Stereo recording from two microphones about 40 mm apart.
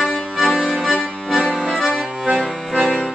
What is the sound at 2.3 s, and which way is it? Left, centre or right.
Accordion, centre.